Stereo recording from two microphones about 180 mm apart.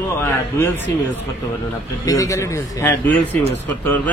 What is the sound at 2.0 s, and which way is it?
A man's voice, 20° left (ahead or behind).